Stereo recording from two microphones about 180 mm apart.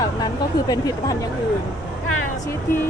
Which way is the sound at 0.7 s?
20° left (ahead or behind).